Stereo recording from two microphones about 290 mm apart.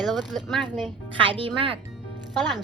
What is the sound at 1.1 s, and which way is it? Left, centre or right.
Speech, centre.